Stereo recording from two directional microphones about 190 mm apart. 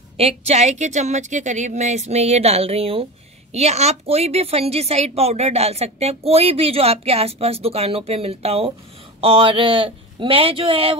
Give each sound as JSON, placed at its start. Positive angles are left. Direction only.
{"t": 0.2, "sound": "a woman's voice", "side_deg": -35}